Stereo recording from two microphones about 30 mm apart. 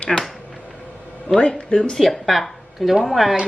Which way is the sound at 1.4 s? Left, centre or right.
Left.